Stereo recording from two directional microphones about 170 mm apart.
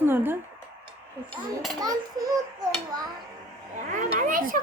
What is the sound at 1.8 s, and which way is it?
A child's voice, 20° right (ahead or behind).